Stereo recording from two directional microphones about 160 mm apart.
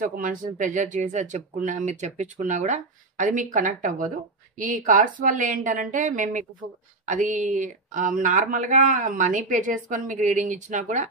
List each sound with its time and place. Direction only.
0.0 s a woman's voice: 60° right (ahead or behind)